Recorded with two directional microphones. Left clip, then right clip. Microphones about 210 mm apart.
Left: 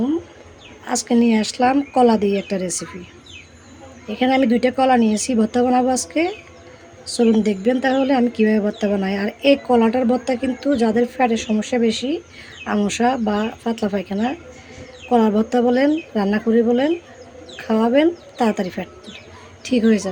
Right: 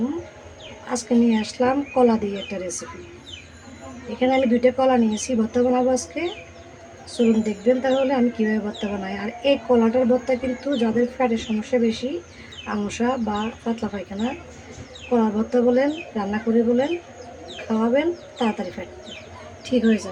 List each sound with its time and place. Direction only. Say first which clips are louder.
0.9 s speech: left 3 dB; 50° left (ahead or behind)
4.2 s speech: left 1 dB; 50° left (ahead or behind)
7.4 s speech: left 2 dB; 50° left (ahead or behind)